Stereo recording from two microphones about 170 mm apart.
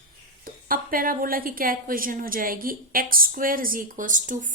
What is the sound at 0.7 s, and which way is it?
A woman's voice, 55° right (ahead or behind).